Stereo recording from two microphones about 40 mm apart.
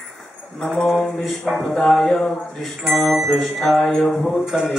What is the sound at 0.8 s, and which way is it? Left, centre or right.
Music, centre.